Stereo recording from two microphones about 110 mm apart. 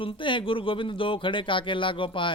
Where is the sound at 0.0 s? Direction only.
50° left (ahead or behind).